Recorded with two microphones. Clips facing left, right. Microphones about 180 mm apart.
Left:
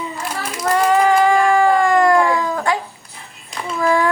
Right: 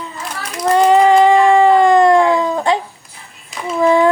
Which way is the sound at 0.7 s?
20° right (ahead or behind).